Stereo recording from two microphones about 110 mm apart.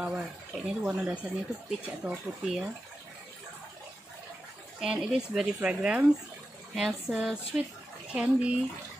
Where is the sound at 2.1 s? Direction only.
5° right (ahead or behind).